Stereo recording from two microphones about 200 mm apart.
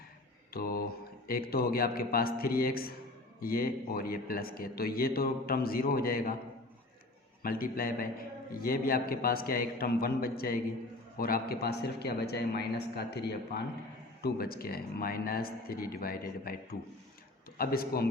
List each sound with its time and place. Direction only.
0.5 s mantra: 50° left (ahead or behind)
1.3 s a man's voice: 50° left (ahead or behind)
7.4 s a man's voice: 45° left (ahead or behind)